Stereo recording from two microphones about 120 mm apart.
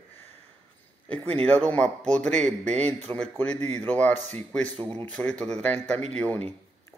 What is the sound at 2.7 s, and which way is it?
Speech, 60° right (ahead or behind).